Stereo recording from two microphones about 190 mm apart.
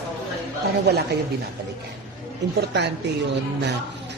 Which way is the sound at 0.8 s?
60° right (ahead or behind).